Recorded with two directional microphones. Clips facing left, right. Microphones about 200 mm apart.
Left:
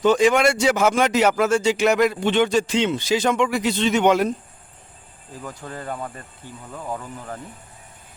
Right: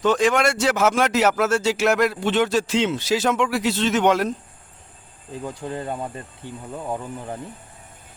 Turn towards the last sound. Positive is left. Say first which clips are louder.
# right 2 dB
turn(degrees=-20)  # may be behind; listen again after turning